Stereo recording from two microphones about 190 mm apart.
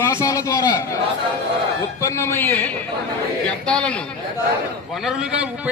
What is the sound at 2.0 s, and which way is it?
Speech, 15° left (ahead or behind).